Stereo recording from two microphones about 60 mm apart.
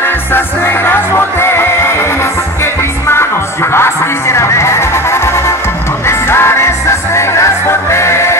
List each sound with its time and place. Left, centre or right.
0.3 s music: left